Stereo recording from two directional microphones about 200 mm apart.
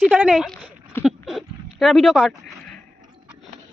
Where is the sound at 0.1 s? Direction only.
5° right (ahead or behind).